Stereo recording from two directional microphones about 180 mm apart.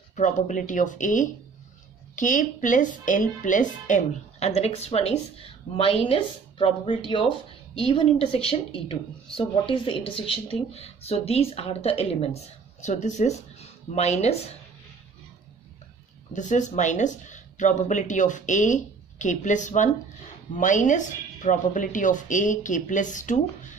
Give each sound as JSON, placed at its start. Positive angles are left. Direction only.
{"t": 0.1, "sound": "speech", "side_deg": 45}
{"t": 16.3, "sound": "speech", "side_deg": 45}